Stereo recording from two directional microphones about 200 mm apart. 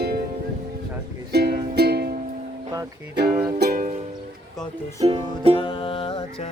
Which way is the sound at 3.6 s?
45° right (ahead or behind).